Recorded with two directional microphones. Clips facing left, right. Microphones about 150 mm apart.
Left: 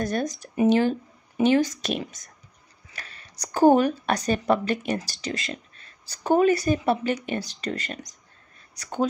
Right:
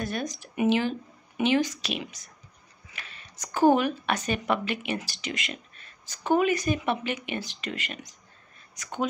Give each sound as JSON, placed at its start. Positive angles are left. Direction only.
{"t": 0.0, "sound": "a woman's voice", "side_deg": 45}